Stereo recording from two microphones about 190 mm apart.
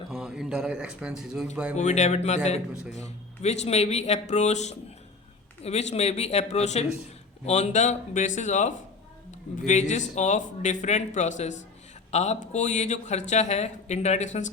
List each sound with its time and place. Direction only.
0.1 s a man's voice: 5° right (ahead or behind)
1.7 s speech: 35° left (ahead or behind)
5.9 s speech: 35° left (ahead or behind)
9.9 s speech: 40° left (ahead or behind)